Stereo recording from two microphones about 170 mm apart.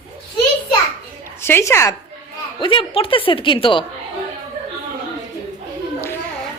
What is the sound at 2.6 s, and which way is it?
A woman's voice, 30° left (ahead or behind).